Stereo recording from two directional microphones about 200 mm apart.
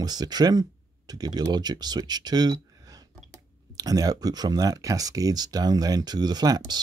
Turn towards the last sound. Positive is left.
turn(degrees=-20)  # may be behind; listen again after turning